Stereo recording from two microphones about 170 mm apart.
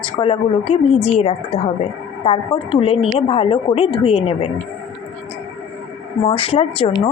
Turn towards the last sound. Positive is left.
turn(degrees=35)  # may be behind; listen again after turning